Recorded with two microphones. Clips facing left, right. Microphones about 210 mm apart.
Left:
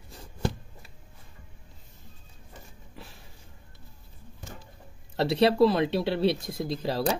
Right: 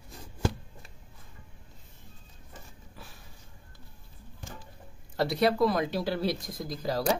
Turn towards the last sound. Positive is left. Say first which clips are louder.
# left 3 dB
turn(degrees=25)  # may be behind; listen again after turning